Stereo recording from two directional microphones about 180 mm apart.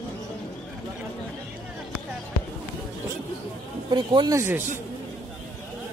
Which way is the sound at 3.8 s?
25° right (ahead or behind).